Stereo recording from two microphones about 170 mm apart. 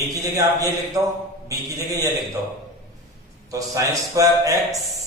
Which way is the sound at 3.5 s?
20° right (ahead or behind).